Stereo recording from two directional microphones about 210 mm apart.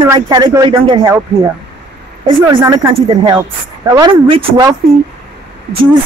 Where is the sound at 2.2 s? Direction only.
20° right (ahead or behind).